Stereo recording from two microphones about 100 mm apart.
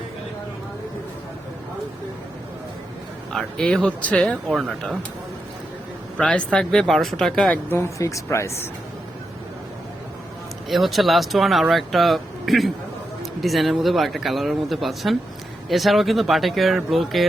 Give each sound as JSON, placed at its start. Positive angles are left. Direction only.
{"t": 3.3, "sound": "speech", "side_deg": 5}
{"t": 4.4, "sound": "speech", "side_deg": -5}
{"t": 6.1, "sound": "speech", "side_deg": 10}
{"t": 7.7, "sound": "speech", "side_deg": 30}
{"t": 10.7, "sound": "speech", "side_deg": 0}